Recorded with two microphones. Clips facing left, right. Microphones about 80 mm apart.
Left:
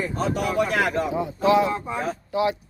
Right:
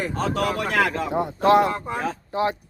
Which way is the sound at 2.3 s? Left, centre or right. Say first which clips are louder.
Left 1 dB; right.